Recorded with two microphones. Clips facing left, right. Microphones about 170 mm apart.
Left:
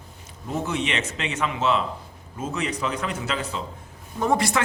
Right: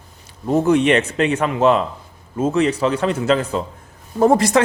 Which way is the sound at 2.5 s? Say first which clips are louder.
Right 9 dB; 30° right (ahead or behind).